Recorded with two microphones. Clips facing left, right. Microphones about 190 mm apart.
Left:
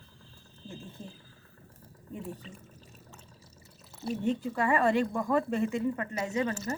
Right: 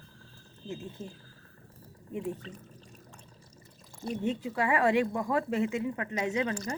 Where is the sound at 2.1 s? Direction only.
15° right (ahead or behind).